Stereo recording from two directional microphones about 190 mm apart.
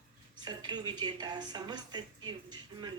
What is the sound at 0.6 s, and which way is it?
Speech, 20° right (ahead or behind).